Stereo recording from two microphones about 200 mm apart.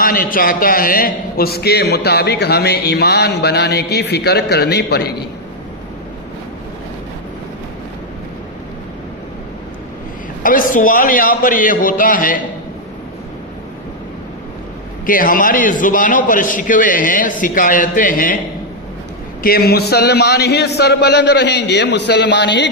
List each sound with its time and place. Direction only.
0.0 s a man's voice: 45° left (ahead or behind)
10.4 s a man's voice: 45° left (ahead or behind)
15.0 s a man's voice: 45° left (ahead or behind)
19.4 s a man's voice: 50° left (ahead or behind)